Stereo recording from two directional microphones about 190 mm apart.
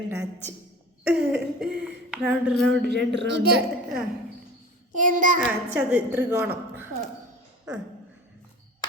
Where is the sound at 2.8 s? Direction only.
60° right (ahead or behind).